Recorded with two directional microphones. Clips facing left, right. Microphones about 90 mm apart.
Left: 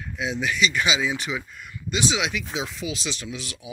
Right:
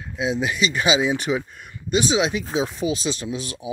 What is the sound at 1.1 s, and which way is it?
Speech, 45° right (ahead or behind).